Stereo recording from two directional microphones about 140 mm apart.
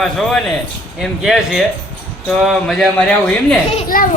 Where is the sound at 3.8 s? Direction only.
90° left.